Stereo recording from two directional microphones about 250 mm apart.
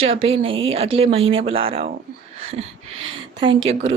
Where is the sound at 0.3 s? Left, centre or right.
Right.